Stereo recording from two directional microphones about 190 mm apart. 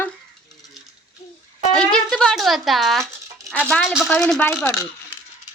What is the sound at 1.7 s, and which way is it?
Speech, 5° left (ahead or behind).